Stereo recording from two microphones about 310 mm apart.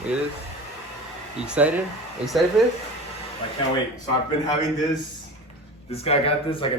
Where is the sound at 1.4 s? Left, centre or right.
Centre.